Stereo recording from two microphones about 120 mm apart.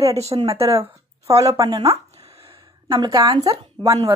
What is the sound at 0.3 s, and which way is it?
Speech, 40° right (ahead or behind).